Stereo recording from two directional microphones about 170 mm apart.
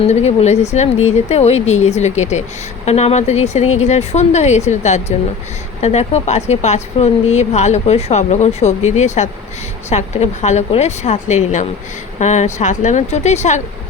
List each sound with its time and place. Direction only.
0.1 s speech: 40° left (ahead or behind)